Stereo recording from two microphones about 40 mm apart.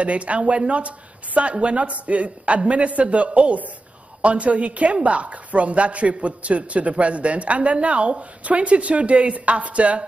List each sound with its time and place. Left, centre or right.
0.0 s speech: right